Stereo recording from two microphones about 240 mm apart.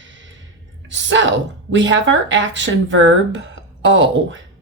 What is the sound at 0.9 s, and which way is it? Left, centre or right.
A woman's voice, right.